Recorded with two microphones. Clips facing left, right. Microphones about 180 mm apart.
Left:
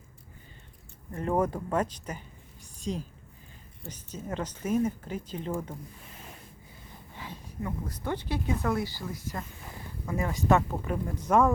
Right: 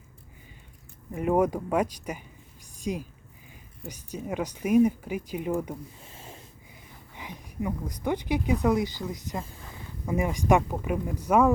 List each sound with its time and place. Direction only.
1.1 s speech: 10° right (ahead or behind)
6.0 s a sound: 25° right (ahead or behind)
7.2 s speech: 15° right (ahead or behind)